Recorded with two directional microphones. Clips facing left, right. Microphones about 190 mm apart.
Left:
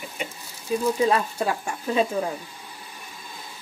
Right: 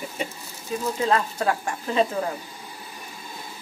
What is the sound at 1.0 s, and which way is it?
Speech, 10° left (ahead or behind).